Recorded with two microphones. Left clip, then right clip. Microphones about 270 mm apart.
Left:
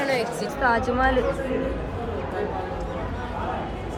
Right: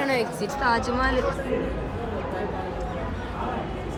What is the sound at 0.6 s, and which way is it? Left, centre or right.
Speech, centre.